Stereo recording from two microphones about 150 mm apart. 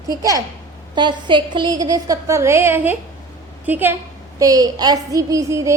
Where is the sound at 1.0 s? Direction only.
30° right (ahead or behind); by 4.0 s 15° right (ahead or behind).